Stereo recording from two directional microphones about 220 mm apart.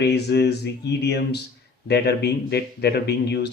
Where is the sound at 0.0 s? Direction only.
50° left (ahead or behind).